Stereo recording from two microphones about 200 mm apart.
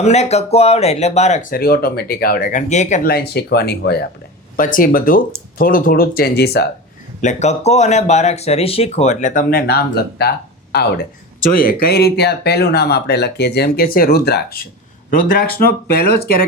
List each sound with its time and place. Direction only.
0.0 s speech: 35° left (ahead or behind); by 4.0 s 55° left (ahead or behind)
4.5 s speech: 45° left (ahead or behind)
7.2 s speech: 35° left (ahead or behind)